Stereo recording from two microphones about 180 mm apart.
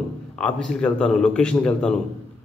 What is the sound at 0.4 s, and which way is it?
A man's voice, 5° left (ahead or behind).